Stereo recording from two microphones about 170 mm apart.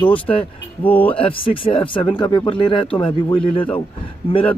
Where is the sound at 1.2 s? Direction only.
30° left (ahead or behind).